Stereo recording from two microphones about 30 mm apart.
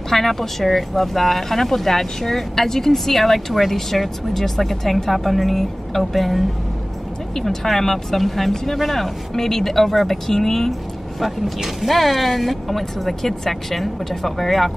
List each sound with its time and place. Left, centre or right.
0.1 s speech: centre
10.7 s speech: centre